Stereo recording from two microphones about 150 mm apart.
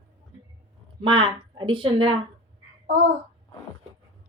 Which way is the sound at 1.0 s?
35° right (ahead or behind).